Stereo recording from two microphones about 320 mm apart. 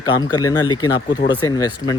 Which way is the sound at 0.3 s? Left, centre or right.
Centre.